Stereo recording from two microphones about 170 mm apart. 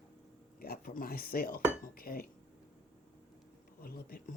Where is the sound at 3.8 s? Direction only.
60° left (ahead or behind).